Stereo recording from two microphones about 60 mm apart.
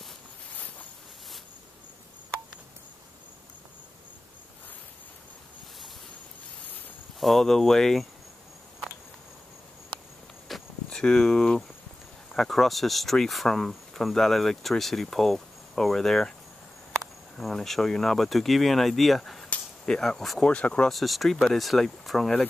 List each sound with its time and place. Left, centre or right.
7.2 s speech: centre
10.5 s cricket: centre
12.4 s speech: centre
17.4 s speech: centre
20.4 s speech: left
20.9 s speech: centre